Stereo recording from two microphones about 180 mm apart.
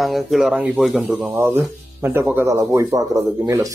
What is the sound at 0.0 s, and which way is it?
Speech, centre (ahead or behind).